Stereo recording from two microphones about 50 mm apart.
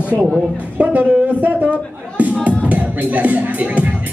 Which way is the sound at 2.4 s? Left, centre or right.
Right.